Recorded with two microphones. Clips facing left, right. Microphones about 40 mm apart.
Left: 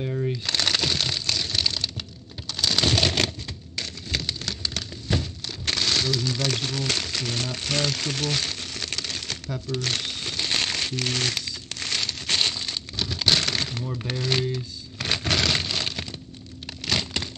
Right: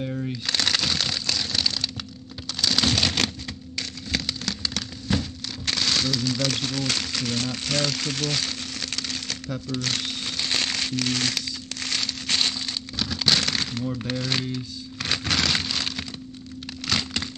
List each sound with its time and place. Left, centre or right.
0.0 s speech: centre
0.6 s a sound: left
5.7 s speech: left
9.7 s crumpling: left
14.0 s speech: left
14.5 s music: left
16.8 s crack: left